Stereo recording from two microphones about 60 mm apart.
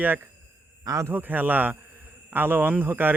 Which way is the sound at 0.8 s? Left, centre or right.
Right.